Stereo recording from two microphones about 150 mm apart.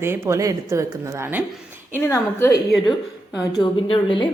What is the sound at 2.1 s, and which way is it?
Speech, 20° left (ahead or behind).